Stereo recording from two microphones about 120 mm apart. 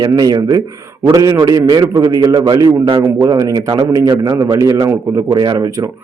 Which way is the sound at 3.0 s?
20° right (ahead or behind).